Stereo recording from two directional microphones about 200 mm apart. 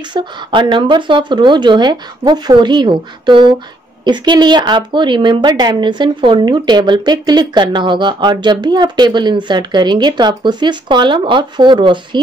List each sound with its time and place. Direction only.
0.1 s speech: 25° right (ahead or behind)